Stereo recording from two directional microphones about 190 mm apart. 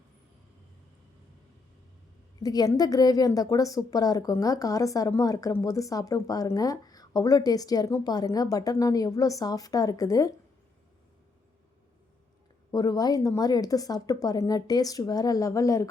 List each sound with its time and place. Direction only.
2.4 s a woman's voice: 20° left (ahead or behind)
12.7 s a woman's voice: 20° left (ahead or behind)